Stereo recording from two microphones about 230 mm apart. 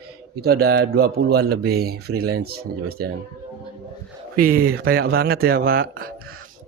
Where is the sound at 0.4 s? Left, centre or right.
Right.